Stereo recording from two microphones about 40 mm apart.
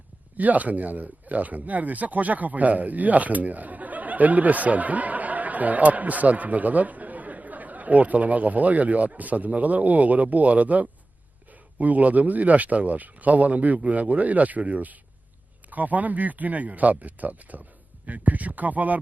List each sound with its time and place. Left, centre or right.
0.3 s speech: right